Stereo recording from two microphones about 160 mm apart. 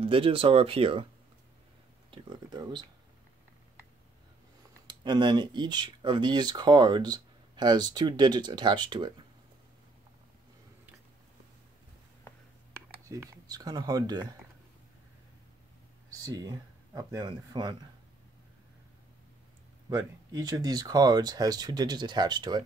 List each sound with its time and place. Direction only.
0.0 s speech: 35° right (ahead or behind)
2.0 s speech: 30° right (ahead or behind)
4.8 s speech: 30° right (ahead or behind)
12.7 s a sound: 20° right (ahead or behind)
16.2 s speech: 25° right (ahead or behind)
19.9 s speech: 20° right (ahead or behind)